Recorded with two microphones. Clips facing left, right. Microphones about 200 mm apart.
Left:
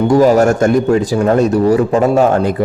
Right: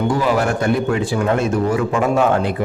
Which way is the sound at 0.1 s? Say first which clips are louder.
Left 8 dB; 40° left (ahead or behind).